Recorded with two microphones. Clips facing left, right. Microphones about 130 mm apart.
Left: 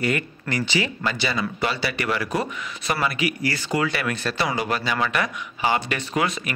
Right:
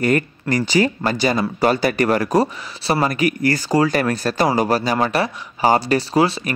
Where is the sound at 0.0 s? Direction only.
40° right (ahead or behind).